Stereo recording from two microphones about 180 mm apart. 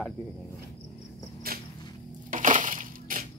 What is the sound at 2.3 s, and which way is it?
Crushing, 45° right (ahead or behind).